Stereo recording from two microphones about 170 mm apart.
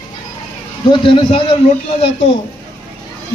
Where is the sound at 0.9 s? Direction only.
30° left (ahead or behind).